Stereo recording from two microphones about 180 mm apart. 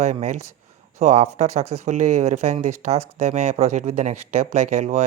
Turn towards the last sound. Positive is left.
turn(degrees=-40)  # may be behind; listen again after turning